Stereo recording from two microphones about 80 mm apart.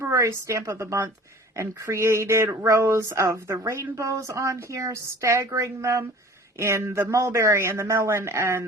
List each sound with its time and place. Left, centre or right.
0.0 s a woman's voice: right